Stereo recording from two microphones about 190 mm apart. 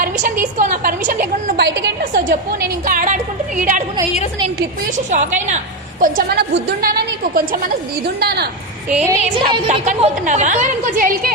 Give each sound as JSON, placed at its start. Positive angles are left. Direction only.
{"t": 0.0, "sound": "a woman's voice", "side_deg": -45}
{"t": 1.5, "sound": "a woman's voice", "side_deg": -60}
{"t": 2.2, "sound": "a woman's voice", "side_deg": -50}
{"t": 5.1, "sound": "a woman's voice", "side_deg": -40}
{"t": 6.0, "sound": "a woman's voice", "side_deg": -50}
{"t": 8.9, "sound": "a woman's voice", "side_deg": -5}
{"t": 9.2, "sound": "a woman's voice", "side_deg": -30}